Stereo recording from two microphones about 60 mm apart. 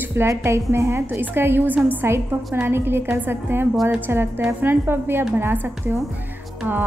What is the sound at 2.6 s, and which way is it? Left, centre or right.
A woman's voice, right.